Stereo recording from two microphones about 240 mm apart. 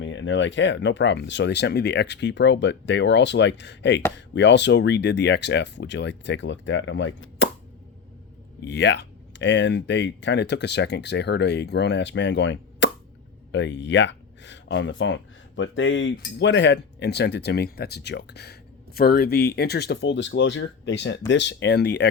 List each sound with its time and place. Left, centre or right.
0.0 s speech: left
8.6 s speech: left